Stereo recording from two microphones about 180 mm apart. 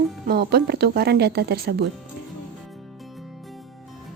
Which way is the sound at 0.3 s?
60° right (ahead or behind).